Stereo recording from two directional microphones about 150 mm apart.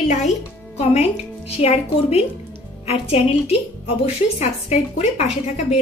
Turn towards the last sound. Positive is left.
turn(degrees=45)  # may be behind; listen again after turning